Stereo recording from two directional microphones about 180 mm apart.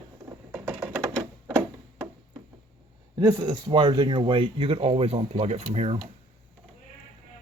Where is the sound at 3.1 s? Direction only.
20° right (ahead or behind).